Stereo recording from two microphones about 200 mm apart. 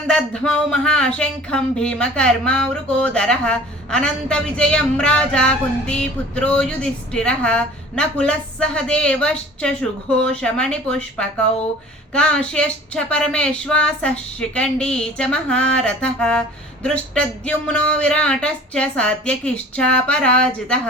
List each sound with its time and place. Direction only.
0.1 s speech: 5° left (ahead or behind)